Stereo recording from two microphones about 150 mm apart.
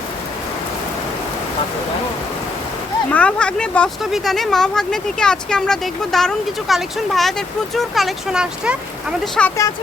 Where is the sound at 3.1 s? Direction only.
10° left (ahead or behind).